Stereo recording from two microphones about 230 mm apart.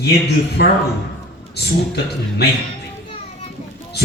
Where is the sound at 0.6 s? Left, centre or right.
Left.